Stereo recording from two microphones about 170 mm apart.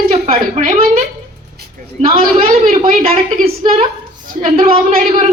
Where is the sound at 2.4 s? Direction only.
60° right (ahead or behind).